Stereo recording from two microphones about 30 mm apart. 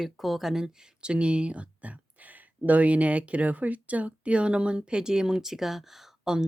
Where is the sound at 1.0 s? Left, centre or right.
Right; by 6.1 s centre.